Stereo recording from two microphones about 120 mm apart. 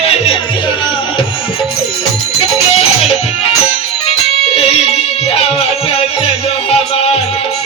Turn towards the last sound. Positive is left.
turn(degrees=55)  # may be behind; listen again after turning